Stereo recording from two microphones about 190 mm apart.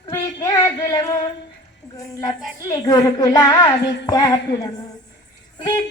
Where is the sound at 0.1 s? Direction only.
20° left (ahead or behind).